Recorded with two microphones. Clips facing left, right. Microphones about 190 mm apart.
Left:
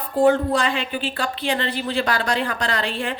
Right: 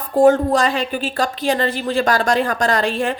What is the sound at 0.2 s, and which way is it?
Speech, 45° right (ahead or behind).